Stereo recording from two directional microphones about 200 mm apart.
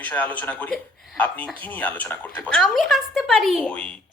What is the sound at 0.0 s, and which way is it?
Speech, 10° left (ahead or behind).